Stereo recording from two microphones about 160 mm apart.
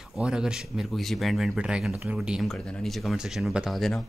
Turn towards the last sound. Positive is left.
turn(degrees=0)  # may be behind; listen again after turning